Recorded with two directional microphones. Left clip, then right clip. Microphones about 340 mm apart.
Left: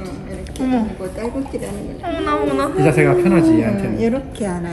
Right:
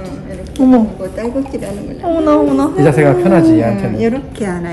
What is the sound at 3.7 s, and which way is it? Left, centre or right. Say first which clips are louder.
A woman's voice: right 4 dB; centre.